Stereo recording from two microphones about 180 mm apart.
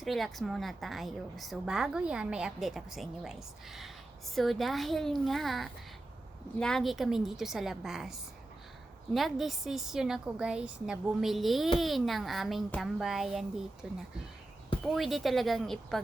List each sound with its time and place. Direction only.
0.0 s a woman's voice: centre (ahead or behind)